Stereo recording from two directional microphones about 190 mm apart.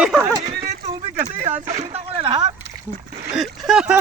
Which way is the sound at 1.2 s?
35° right (ahead or behind).